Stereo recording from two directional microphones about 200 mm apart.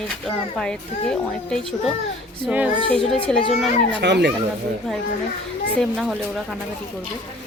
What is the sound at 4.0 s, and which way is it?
Speech, 60° right (ahead or behind).